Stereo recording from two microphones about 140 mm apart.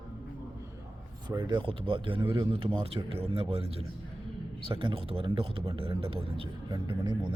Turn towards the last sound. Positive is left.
turn(degrees=-35)  # may be behind; listen again after turning